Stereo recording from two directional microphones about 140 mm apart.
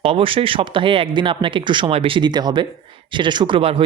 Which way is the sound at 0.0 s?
40° right (ahead or behind).